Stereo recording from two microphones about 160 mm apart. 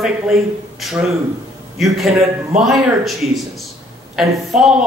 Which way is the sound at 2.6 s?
Centre (ahead or behind).